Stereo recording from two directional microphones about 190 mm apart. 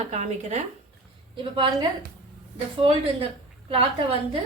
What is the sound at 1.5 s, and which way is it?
Speech, 25° right (ahead or behind).